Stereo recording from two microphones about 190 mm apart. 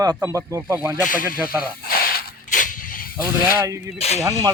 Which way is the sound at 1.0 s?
45° left (ahead or behind).